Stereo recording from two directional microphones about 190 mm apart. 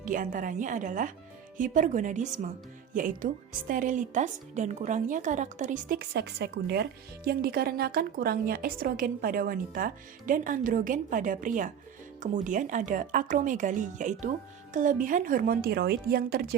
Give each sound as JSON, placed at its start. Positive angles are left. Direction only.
{"t": 0.0, "sound": "speech", "side_deg": -45}